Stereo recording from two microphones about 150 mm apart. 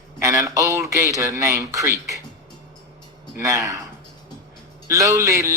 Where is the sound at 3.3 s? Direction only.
20° right (ahead or behind).